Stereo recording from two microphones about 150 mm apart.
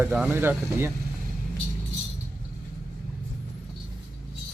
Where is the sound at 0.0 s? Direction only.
10° right (ahead or behind).